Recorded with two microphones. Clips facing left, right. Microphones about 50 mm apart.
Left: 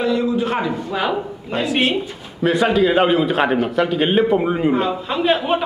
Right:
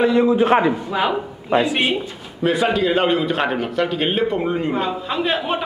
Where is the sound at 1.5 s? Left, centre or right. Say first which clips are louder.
Right 4 dB; centre.